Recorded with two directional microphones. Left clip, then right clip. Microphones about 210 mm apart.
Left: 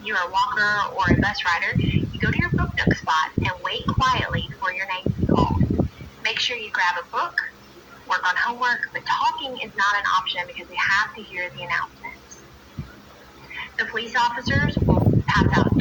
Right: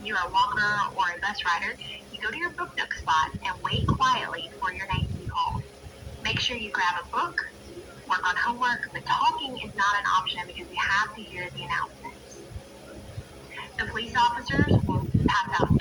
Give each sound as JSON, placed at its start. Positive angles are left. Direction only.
{"t": 0.0, "sound": "a woman's voice", "side_deg": 20}
{"t": 13.6, "sound": "a woman's voice", "side_deg": 20}